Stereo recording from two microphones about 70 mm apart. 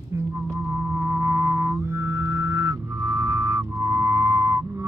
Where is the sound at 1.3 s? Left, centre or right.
Right.